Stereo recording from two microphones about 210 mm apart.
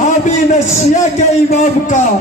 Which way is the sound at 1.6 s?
35° left (ahead or behind).